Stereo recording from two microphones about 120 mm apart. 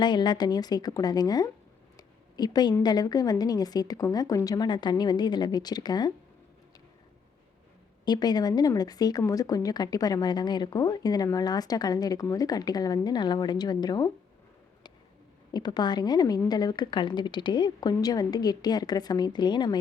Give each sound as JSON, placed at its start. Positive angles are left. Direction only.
{"t": 0.0, "sound": "a woman's voice", "side_deg": 40}
{"t": 2.0, "sound": "a sound", "side_deg": 35}
{"t": 2.8, "sound": "a woman's voice", "side_deg": 35}
{"t": 8.0, "sound": "a woman's voice", "side_deg": 35}
{"t": 15.5, "sound": "a woman's voice", "side_deg": 35}